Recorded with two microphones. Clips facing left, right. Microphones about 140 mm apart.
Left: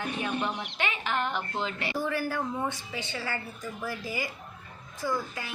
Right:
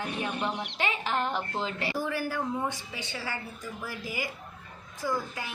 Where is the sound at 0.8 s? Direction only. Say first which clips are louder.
Right 1 dB; 35° right (ahead or behind).